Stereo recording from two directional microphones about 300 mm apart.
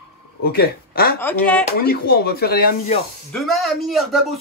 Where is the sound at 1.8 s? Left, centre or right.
Left.